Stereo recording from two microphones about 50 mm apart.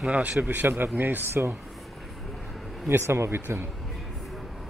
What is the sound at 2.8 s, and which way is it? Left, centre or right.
Speech, right.